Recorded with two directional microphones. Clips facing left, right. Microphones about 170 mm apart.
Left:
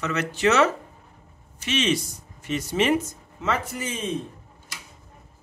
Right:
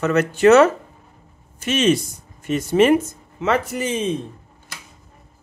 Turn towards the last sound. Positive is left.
turn(degrees=-80)